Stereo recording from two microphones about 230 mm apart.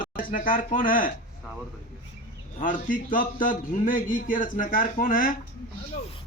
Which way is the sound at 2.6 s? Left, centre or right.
Left.